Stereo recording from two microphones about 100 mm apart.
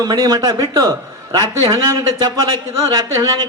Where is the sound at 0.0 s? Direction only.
40° right (ahead or behind).